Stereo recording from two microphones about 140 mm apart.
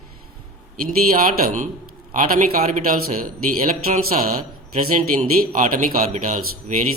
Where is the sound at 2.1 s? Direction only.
90° right.